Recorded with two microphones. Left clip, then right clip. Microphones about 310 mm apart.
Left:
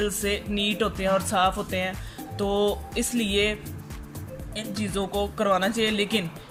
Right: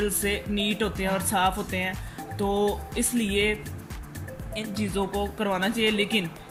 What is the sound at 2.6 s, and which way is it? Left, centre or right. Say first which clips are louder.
Speech: left 1 dB; centre.